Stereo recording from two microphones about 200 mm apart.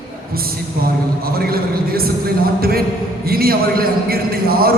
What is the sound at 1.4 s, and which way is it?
Speech, 50° right (ahead or behind).